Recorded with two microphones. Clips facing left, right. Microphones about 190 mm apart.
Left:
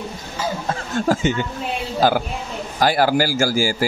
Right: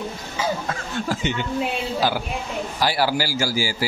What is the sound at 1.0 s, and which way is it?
Speech, 45° left (ahead or behind).